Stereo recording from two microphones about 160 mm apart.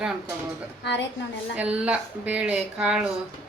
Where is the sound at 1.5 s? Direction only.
5° right (ahead or behind).